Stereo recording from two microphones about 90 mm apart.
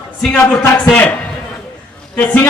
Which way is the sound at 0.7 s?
15° left (ahead or behind).